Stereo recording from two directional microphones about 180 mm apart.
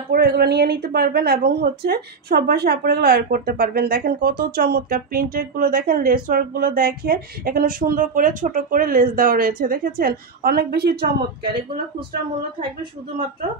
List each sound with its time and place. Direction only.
0.1 s a woman's voice: 65° right (ahead or behind)